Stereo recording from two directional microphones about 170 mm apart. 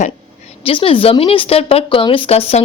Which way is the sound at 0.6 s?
30° left (ahead or behind).